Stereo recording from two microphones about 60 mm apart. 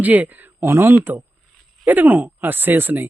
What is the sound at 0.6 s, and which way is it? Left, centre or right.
Speech, right.